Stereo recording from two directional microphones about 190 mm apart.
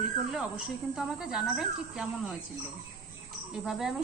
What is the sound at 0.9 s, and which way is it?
Speech, 5° right (ahead or behind).